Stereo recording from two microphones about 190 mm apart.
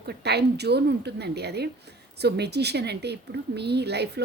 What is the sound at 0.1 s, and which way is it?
A woman's voice, 60° right (ahead or behind).